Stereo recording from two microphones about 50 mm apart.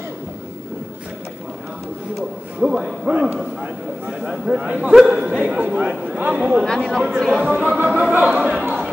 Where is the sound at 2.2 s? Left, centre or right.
Centre.